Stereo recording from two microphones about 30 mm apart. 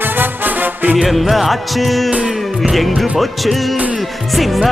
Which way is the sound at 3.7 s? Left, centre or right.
Right.